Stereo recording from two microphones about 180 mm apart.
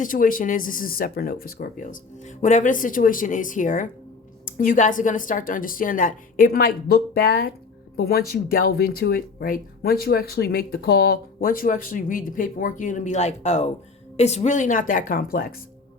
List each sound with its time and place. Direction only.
0.0 s speech: 50° left (ahead or behind)